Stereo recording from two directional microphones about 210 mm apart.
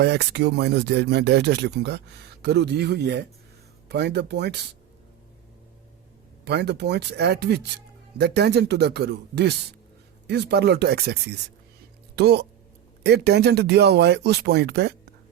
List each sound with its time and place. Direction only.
0.0 s speech: 50° right (ahead or behind)
6.4 s speech: 50° right (ahead or behind)